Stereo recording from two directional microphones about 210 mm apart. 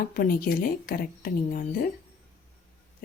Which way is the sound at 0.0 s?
45° left (ahead or behind).